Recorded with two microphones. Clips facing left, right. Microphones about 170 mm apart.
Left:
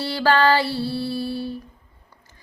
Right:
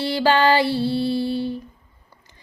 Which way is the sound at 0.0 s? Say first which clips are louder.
Right 1 dB; 15° right (ahead or behind).